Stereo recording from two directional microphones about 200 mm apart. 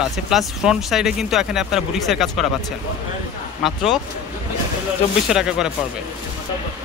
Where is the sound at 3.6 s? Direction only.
Centre (ahead or behind).